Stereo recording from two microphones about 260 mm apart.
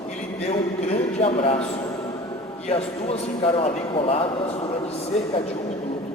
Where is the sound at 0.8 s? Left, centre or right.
Left.